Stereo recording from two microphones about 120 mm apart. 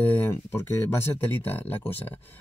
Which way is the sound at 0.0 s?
15° left (ahead or behind).